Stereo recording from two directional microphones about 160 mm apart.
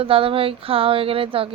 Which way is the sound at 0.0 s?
35° right (ahead or behind).